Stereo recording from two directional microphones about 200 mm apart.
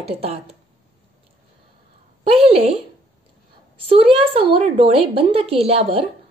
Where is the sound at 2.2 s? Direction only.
30° right (ahead or behind).